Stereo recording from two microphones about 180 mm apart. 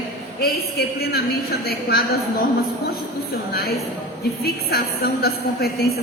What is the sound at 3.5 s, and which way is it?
A woman's voice, 60° left (ahead or behind).